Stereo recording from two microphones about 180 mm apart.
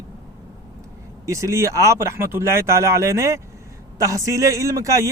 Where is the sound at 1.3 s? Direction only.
15° right (ahead or behind).